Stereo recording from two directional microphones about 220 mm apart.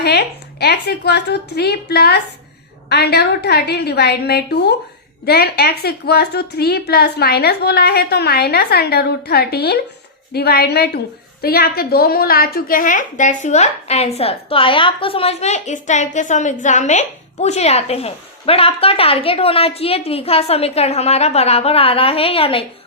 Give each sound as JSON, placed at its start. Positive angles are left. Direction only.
{"t": 0.0, "sound": "a woman's voice", "side_deg": 45}